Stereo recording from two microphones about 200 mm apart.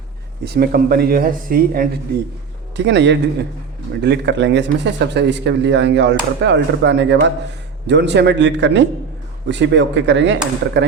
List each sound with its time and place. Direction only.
0.4 s speech: 50° right (ahead or behind)
2.7 s speech: 60° right (ahead or behind)